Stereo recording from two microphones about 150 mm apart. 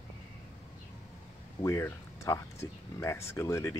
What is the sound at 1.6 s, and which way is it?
Speech, 20° left (ahead or behind).